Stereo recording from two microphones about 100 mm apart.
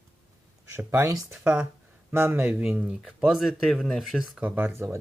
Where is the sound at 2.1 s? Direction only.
25° right (ahead or behind).